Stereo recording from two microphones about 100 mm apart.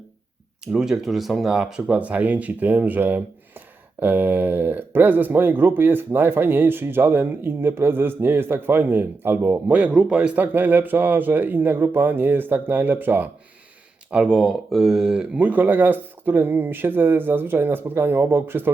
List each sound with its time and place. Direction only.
0.6 s speech: 5° right (ahead or behind); by 9.8 s 25° right (ahead or behind)
9.8 s speech: 10° right (ahead or behind)
14.1 s speech: 10° right (ahead or behind)